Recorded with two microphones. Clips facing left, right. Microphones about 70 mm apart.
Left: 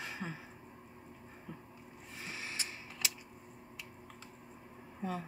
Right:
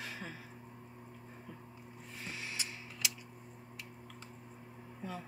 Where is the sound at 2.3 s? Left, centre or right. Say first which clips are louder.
Left 1 dB; left.